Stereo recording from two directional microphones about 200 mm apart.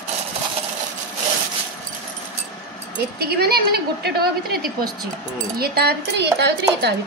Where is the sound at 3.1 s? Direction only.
55° right (ahead or behind).